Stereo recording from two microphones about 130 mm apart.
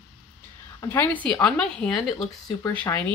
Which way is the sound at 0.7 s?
15° left (ahead or behind).